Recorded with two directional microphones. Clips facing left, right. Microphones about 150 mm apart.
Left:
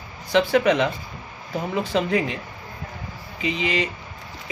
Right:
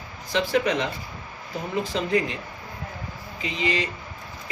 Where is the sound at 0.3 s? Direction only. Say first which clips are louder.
Left 5 dB; 60° left (ahead or behind).